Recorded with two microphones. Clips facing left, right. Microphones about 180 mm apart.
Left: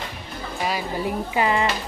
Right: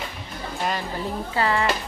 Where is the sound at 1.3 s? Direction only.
15° left (ahead or behind).